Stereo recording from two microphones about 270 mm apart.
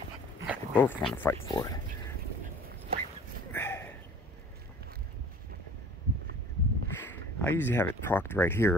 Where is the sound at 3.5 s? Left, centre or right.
Centre.